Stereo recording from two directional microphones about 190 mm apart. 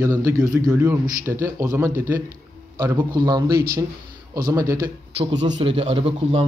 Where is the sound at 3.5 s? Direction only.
50° right (ahead or behind).